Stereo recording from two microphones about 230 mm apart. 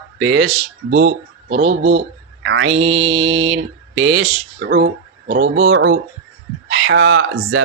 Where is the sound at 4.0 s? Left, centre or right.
Right.